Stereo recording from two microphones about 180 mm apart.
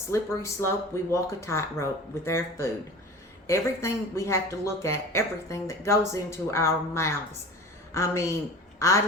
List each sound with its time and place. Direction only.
0.1 s speech: 15° left (ahead or behind)